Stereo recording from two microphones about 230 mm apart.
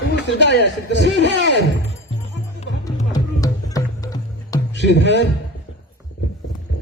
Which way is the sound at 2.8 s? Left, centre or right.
Centre.